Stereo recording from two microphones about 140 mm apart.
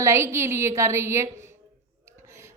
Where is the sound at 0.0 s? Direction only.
20° right (ahead or behind).